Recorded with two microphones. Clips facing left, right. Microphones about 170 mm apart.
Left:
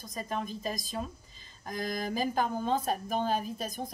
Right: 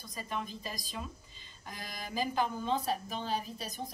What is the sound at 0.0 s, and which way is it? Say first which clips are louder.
Speech: left 4 dB; 45° left (ahead or behind).